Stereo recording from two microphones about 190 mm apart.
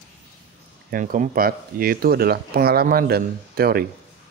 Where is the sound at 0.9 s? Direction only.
45° right (ahead or behind).